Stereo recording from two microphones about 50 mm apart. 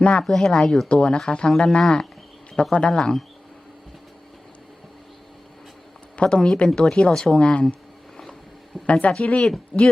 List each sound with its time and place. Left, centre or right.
0.0 s speech: left
0.3 s speech: centre
0.9 s speech: centre
6.1 s speech: centre
8.1 s boat: centre
8.9 s speech: left
9.7 s speech: centre